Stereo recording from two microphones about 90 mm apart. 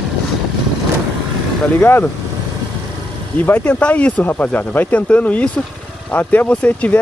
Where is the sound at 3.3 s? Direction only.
20° left (ahead or behind).